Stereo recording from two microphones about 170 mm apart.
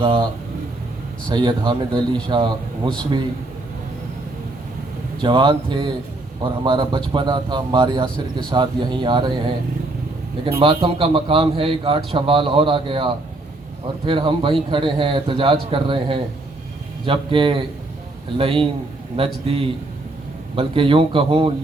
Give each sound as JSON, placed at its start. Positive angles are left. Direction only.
{"t": 0.0, "sound": "speech", "side_deg": -30}
{"t": 1.3, "sound": "speech", "side_deg": -25}
{"t": 5.2, "sound": "speech", "side_deg": -30}
{"t": 10.6, "sound": "a man's voice", "side_deg": -30}